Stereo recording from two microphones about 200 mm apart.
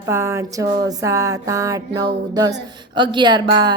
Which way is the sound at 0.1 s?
15° right (ahead or behind).